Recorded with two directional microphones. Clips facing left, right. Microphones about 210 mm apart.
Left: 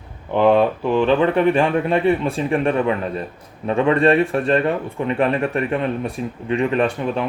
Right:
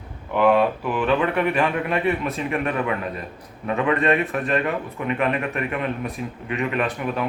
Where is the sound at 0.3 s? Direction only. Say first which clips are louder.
Left 3 dB; 30° left (ahead or behind).